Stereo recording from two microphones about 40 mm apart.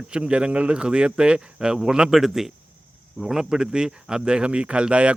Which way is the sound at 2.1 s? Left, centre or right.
Centre.